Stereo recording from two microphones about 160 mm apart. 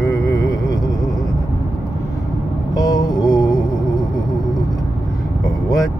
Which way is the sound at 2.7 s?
25° left (ahead or behind).